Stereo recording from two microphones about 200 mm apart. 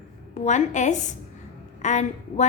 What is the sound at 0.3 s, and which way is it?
A woman's voice, 35° left (ahead or behind).